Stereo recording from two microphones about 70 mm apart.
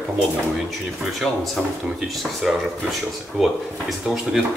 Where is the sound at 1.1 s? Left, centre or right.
Centre.